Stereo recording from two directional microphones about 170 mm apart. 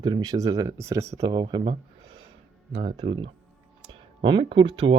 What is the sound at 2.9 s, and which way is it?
Speech, 30° right (ahead or behind).